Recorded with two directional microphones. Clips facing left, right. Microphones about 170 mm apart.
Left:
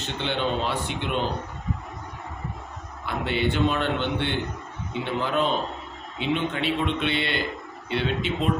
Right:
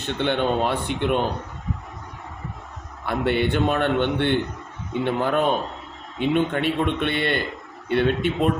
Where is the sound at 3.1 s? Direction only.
55° right (ahead or behind).